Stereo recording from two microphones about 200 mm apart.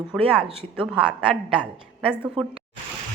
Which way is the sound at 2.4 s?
25° right (ahead or behind).